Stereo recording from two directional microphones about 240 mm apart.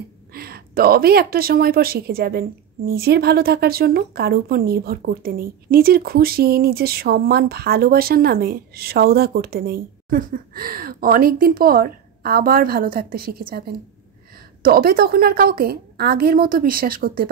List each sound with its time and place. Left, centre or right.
0.3 s speech: right